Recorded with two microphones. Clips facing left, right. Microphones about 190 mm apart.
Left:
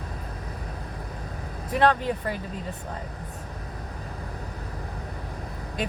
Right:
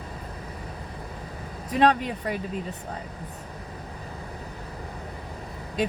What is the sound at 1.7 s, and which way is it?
Speech, 20° right (ahead or behind).